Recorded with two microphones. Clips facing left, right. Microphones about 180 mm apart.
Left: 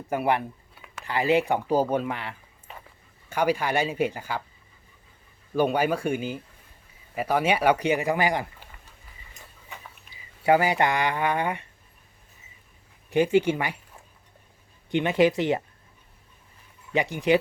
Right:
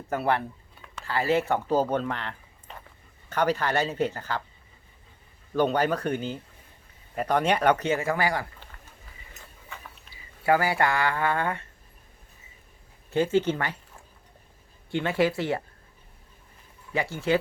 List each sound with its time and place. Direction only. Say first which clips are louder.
0.1 s speech: left 1 dB; 10° left (ahead or behind)
5.5 s speech: left 1 dB; 10° left (ahead or behind)
10.4 s speech: left 2 dB; 20° left (ahead or behind)
13.1 s speech: left 2 dB; 15° left (ahead or behind)
14.8 s speech: left 4 dB; 20° left (ahead or behind)
16.9 s speech: left 3 dB; 15° left (ahead or behind)